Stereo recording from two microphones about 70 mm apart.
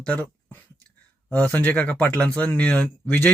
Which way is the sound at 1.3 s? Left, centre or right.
Left.